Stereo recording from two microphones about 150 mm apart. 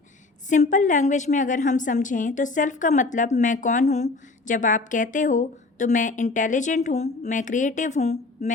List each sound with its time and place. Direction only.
0.5 s a woman's voice: 55° left (ahead or behind)